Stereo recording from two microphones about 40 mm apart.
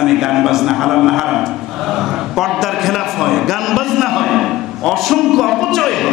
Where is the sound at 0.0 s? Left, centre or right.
Centre.